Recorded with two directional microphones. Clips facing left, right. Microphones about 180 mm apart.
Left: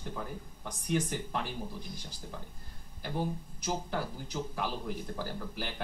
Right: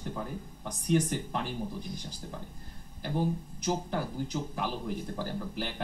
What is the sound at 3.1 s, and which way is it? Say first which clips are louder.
Speech: right 4 dB; 15° right (ahead or behind).